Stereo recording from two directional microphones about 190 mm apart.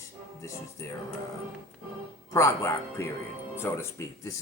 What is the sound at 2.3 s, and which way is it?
Speech, 15° left (ahead or behind).